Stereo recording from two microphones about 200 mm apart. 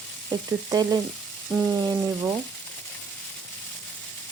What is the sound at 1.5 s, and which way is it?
Speech, 10° right (ahead or behind).